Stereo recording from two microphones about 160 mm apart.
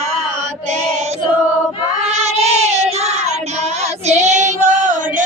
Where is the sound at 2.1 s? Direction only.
45° right (ahead or behind).